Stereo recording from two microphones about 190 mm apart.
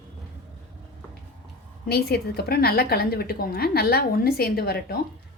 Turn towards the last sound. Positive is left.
turn(degrees=55)  # may be behind; listen again after turning